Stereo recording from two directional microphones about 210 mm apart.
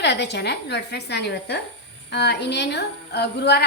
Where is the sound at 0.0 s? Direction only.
55° left (ahead or behind).